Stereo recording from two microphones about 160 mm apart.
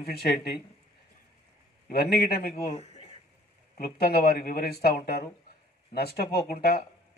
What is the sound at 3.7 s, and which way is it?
Speech, 75° left (ahead or behind).